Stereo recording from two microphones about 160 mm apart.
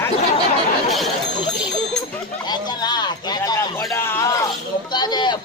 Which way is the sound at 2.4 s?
25° left (ahead or behind).